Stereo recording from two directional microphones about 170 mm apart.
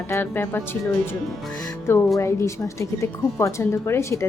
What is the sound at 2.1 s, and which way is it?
A woman's voice, 15° left (ahead or behind).